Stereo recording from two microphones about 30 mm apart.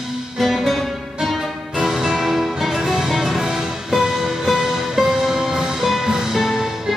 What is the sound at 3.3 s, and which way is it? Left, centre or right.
Music, centre.